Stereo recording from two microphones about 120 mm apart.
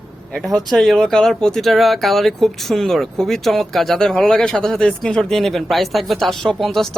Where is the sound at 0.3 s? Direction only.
5° left (ahead or behind).